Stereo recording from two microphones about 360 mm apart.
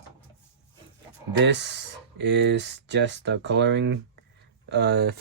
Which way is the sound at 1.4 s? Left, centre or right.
Right.